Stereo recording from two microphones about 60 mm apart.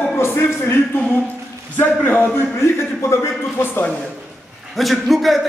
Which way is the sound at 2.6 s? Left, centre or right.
Left.